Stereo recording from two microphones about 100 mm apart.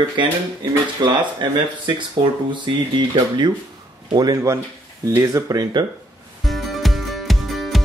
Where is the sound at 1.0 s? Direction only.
50° right (ahead or behind).